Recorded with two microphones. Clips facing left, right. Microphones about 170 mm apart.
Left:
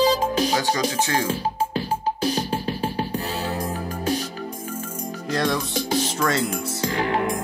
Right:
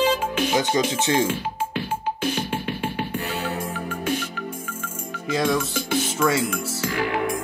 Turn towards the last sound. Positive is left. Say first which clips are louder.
# left 1 dB
turn(degrees=35)  # may be behind; listen again after turning